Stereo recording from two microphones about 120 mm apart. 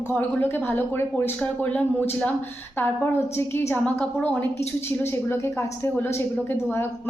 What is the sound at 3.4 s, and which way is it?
A woman's voice, 20° left (ahead or behind).